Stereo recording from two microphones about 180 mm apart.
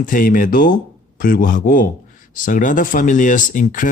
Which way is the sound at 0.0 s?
50° left (ahead or behind).